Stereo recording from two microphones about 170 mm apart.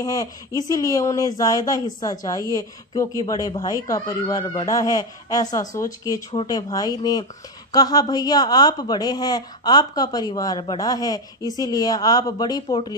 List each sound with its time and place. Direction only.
0.0 s speech: 20° left (ahead or behind)